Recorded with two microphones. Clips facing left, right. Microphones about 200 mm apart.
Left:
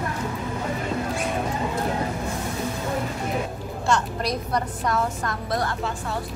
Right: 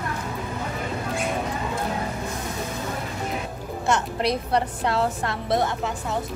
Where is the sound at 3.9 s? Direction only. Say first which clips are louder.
Even; 20° right (ahead or behind).